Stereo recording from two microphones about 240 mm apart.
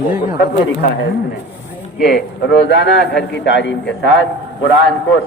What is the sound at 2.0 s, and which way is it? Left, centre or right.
Speech, left.